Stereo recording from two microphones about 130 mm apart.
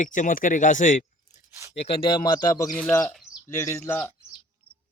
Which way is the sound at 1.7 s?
50° left (ahead or behind).